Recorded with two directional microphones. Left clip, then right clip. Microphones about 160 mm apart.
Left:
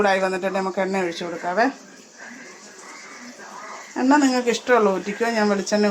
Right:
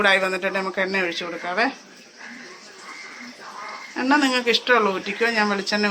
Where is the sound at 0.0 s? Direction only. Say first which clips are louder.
Right 1 dB; 35° left (ahead or behind); by 1.7 s 55° left (ahead or behind).